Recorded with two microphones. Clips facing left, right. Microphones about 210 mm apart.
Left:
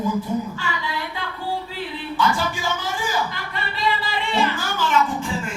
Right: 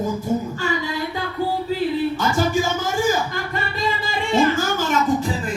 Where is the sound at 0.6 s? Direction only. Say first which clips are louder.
Right 5 dB; 45° right (ahead or behind).